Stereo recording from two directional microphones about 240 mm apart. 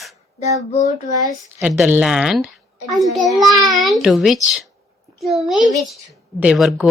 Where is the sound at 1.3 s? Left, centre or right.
Centre.